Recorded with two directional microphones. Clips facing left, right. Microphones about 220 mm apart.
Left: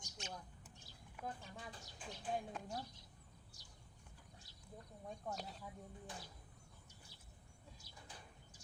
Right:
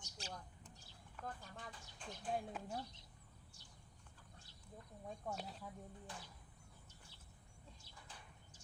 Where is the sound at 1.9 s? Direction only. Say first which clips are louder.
Even; 5° left (ahead or behind).